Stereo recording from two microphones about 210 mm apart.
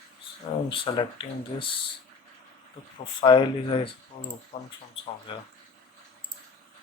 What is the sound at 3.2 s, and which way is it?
Speech, 25° left (ahead or behind).